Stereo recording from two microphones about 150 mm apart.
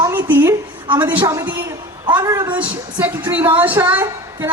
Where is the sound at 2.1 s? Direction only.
20° right (ahead or behind).